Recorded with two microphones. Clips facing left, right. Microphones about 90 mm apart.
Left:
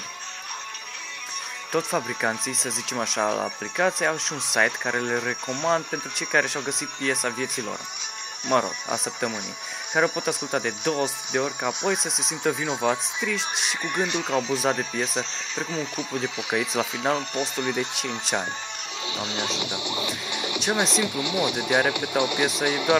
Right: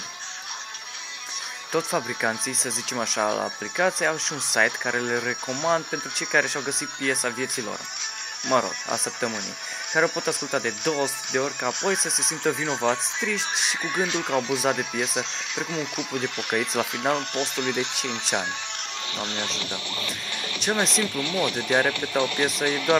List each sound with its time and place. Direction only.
1.7 s speech: centre (ahead or behind)
19.6 s speech: 15° left (ahead or behind)